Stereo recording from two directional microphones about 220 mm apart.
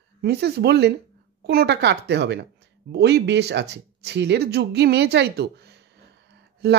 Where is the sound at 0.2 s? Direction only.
50° right (ahead or behind).